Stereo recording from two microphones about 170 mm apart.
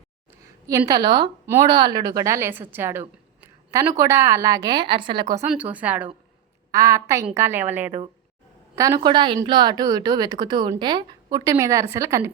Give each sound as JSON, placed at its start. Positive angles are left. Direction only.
{"t": 0.7, "sound": "a woman's voice", "side_deg": -20}
{"t": 5.5, "sound": "a woman's voice", "side_deg": -10}